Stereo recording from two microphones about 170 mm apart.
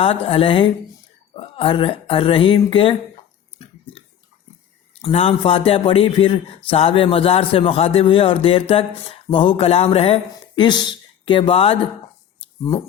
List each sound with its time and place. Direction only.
0.0 s a man's voice: 35° left (ahead or behind)
5.0 s a man's voice: 30° left (ahead or behind)